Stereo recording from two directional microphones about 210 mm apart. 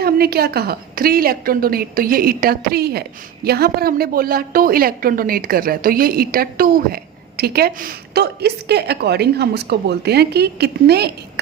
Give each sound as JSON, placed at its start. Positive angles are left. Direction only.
{"t": 0.0, "sound": "a woman's voice", "side_deg": -50}